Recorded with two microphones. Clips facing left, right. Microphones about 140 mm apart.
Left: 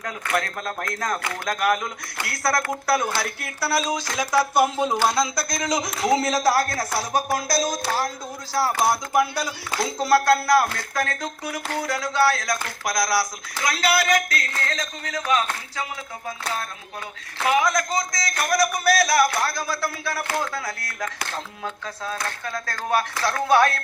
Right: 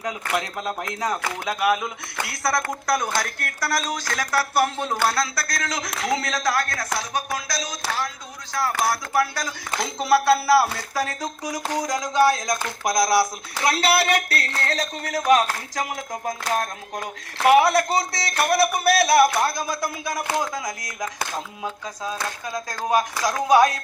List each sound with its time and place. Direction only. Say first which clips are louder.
0.0 s a man's voice: even; 15° right (ahead or behind); by 7.8 s 40° left (ahead or behind)
8.8 s speech: left 1 dB; 20° left (ahead or behind)
10.1 s speech: right 1 dB; 5° right (ahead or behind); by 15.2 s 35° right (ahead or behind)
15.3 s music: right 5 dB; 35° right (ahead or behind)
18.4 s speech: right 1 dB; 30° right (ahead or behind)